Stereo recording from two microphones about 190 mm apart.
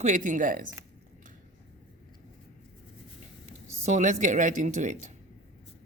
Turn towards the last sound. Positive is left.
turn(degrees=-40)  # may be behind; listen again after turning